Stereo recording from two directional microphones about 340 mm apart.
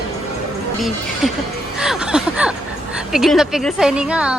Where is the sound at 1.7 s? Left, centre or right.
Centre.